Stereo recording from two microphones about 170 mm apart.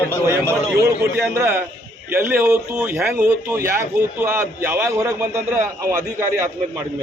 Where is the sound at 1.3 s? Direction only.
15° right (ahead or behind).